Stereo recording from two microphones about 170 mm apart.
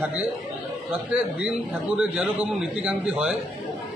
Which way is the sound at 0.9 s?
10° right (ahead or behind).